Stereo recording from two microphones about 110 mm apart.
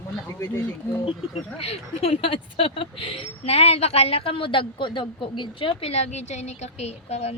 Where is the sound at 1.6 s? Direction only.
60° left (ahead or behind).